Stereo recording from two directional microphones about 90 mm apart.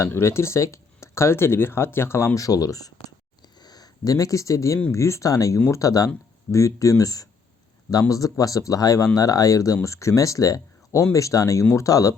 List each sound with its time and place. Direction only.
0.0 s speech: 30° left (ahead or behind)
3.4 s a sound: 50° left (ahead or behind)
4.9 s speech: 35° left (ahead or behind)